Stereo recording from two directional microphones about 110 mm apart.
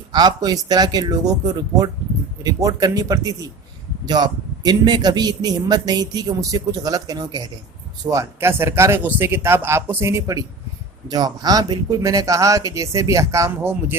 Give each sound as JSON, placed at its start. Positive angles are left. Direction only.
{"t": 0.1, "sound": "speech", "side_deg": -40}